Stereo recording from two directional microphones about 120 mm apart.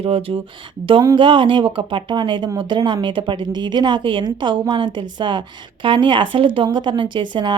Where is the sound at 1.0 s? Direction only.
40° right (ahead or behind).